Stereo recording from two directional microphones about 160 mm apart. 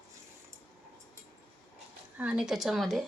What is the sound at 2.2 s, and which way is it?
Speech, 5° right (ahead or behind).